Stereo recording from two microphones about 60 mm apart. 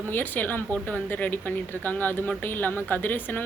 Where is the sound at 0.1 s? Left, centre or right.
Left.